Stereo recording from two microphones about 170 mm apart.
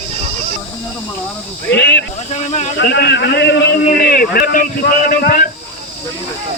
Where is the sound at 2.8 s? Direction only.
75° left (ahead or behind); by 5.4 s 55° left (ahead or behind).